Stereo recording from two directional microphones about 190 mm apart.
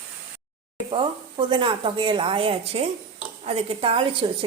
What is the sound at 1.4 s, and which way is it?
A woman's voice, 25° right (ahead or behind).